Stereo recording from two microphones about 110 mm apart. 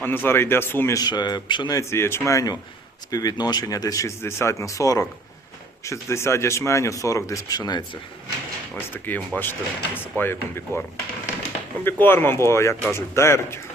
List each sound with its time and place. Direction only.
0.0 s speech: 20° left (ahead or behind)
0.9 s speech: 40° left (ahead or behind)
1.8 s speech: 25° left (ahead or behind)
9.0 s speech: 15° left (ahead or behind)
11.9 s speech: 20° left (ahead or behind)